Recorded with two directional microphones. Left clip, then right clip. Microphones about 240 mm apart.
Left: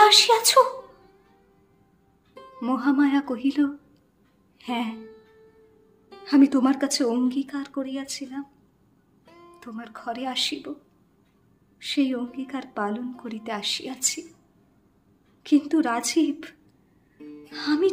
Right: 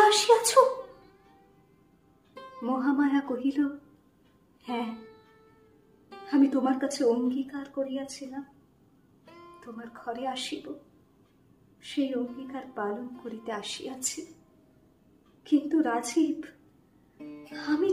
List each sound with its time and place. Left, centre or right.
0.0 s speech: left
0.7 s cat: centre
2.3 s music: centre
2.6 s a woman's voice: left
4.6 s music: left
4.9 s music: centre
6.2 s speech: left
9.2 s music: centre
9.6 s a woman's voice: left
11.8 s a woman's voice: left
15.4 s speech: left
17.2 s music: centre